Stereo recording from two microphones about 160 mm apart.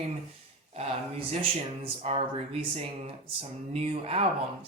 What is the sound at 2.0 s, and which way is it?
Speech, 40° right (ahead or behind).